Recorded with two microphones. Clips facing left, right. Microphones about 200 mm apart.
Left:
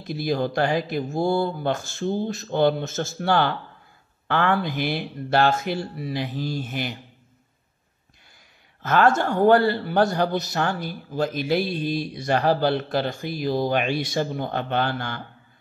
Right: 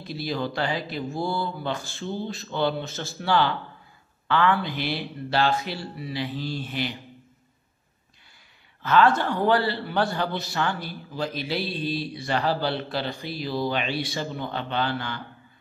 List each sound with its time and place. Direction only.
0.0 s a man's voice: 50° left (ahead or behind)
8.8 s a man's voice: 45° left (ahead or behind)